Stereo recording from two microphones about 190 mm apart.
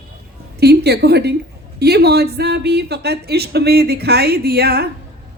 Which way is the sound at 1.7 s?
60° right (ahead or behind).